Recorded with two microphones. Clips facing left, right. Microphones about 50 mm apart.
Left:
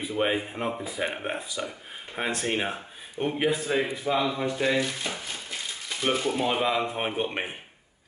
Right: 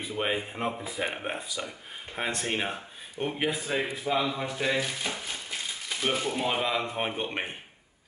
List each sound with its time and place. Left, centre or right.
0.0 s speech: centre